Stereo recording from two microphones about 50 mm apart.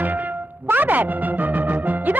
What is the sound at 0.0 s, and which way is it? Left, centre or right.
Music, right.